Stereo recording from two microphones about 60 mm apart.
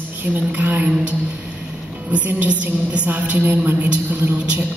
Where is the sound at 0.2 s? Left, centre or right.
Right.